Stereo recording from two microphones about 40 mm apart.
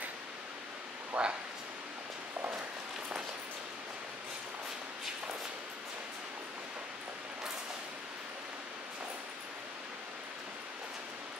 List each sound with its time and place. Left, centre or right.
1.1 s speech: right